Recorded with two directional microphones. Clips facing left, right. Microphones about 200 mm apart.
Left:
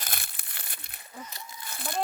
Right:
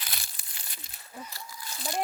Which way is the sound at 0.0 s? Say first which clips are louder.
Left 4 dB; 55° left (ahead or behind).